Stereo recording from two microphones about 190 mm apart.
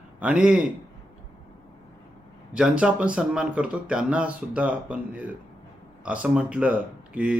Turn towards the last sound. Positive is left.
turn(degrees=-5)  # may be behind; listen again after turning